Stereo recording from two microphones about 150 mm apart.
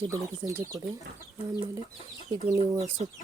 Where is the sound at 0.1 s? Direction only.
20° right (ahead or behind).